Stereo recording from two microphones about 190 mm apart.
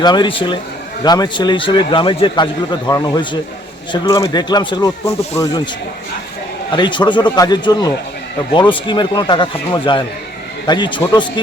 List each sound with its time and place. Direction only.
0.0 s a man's voice: 25° left (ahead or behind)
6.7 s a man's voice: 25° left (ahead or behind)